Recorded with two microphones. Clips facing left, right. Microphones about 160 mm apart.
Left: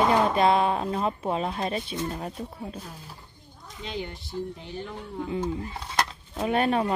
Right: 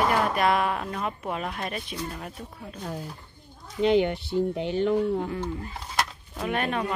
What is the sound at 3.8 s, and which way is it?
Speech, 70° right (ahead or behind).